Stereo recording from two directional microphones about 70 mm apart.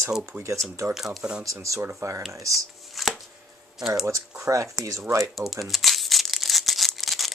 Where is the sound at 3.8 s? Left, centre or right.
Centre.